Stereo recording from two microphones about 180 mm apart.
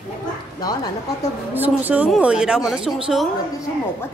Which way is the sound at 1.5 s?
10° right (ahead or behind).